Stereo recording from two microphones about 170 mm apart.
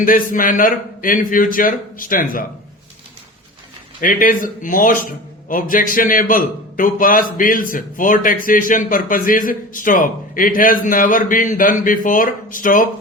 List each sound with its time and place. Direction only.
0.0 s a man's voice: 55° left (ahead or behind)
4.0 s a man's voice: 55° left (ahead or behind)